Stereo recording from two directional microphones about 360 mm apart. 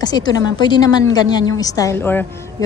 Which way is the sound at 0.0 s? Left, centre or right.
Centre.